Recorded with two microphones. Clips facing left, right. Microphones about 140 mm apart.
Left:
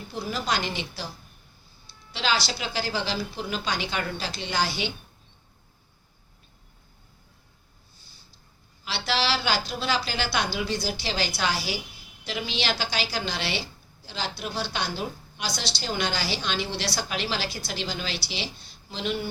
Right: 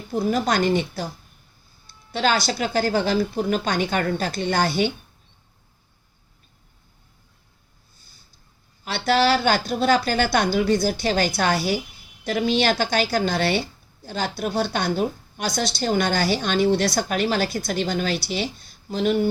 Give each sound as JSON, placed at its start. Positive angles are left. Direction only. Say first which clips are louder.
{"t": 0.1, "sound": "a woman's voice", "louder": "right 8 dB", "side_deg": -50}
{"t": 8.8, "sound": "a woman's voice", "louder": "right 8 dB", "side_deg": -50}